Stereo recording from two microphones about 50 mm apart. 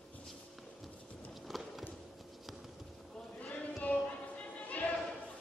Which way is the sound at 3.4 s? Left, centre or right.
Left.